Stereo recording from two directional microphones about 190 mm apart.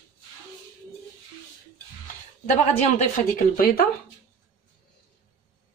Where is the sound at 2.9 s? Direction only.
50° left (ahead or behind).